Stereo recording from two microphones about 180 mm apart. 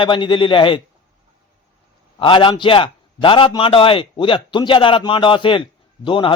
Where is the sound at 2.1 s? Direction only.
30° left (ahead or behind).